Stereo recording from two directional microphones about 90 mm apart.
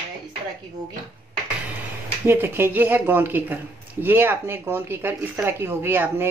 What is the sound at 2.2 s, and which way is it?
Speech, 25° right (ahead or behind).